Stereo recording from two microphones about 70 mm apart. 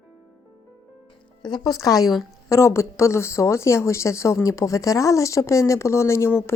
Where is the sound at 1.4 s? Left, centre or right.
Left.